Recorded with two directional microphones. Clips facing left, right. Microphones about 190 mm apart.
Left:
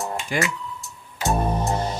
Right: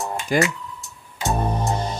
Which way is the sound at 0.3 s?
40° right (ahead or behind).